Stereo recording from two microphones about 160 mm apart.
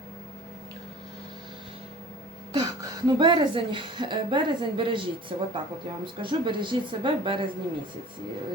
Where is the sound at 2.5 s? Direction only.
25° right (ahead or behind).